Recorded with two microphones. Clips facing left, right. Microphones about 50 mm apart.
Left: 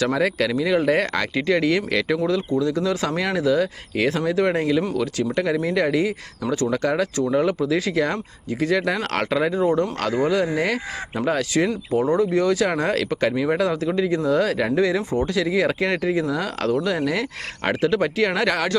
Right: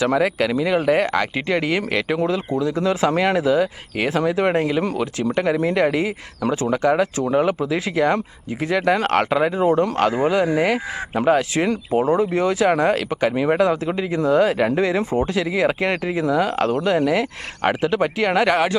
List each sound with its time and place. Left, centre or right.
0.0 s speech: centre
2.6 s speech: centre
2.8 s speech: right
13.3 s speech: right